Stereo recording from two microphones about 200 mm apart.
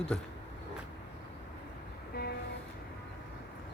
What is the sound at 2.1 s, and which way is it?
Music, 50° left (ahead or behind).